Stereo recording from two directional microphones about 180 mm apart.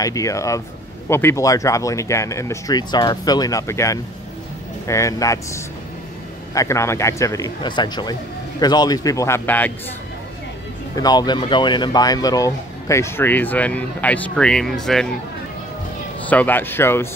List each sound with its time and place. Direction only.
0.0 s a man's voice: 20° left (ahead or behind)
11.0 s speech: 20° left (ahead or behind); by 15.0 s centre (ahead or behind)
16.3 s speech: 10° left (ahead or behind)